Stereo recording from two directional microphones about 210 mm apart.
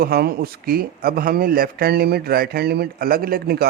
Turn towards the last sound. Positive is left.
turn(degrees=-45)  # may be behind; listen again after turning